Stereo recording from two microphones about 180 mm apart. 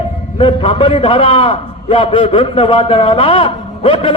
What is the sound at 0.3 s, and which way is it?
A man's voice, 30° left (ahead or behind).